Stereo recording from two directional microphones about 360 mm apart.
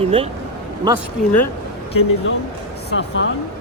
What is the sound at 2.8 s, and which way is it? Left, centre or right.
Speech, left.